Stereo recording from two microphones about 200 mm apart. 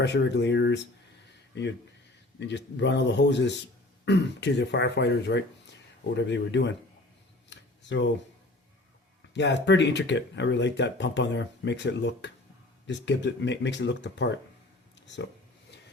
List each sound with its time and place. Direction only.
0.0 s speech: 60° left (ahead or behind)
9.3 s speech: 60° left (ahead or behind)